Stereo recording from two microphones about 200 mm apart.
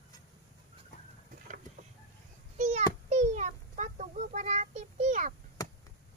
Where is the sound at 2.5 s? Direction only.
40° right (ahead or behind).